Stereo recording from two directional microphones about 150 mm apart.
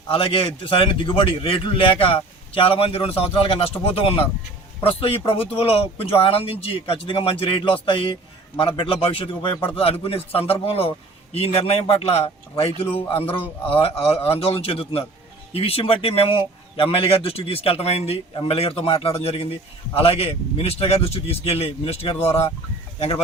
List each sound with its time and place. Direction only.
0.1 s a man's voice: 40° left (ahead or behind)
4.8 s a man's voice: 40° left (ahead or behind)